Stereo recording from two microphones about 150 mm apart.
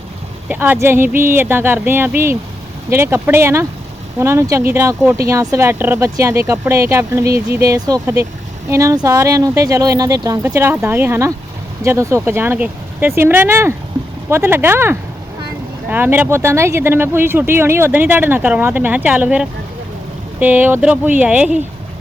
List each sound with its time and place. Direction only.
0.4 s speech: 10° right (ahead or behind)